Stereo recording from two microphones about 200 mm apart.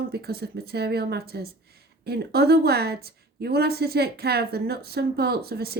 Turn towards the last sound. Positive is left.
turn(degrees=-50)  # may be behind; listen again after turning